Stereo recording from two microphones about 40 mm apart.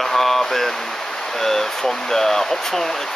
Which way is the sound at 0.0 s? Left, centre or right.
Centre.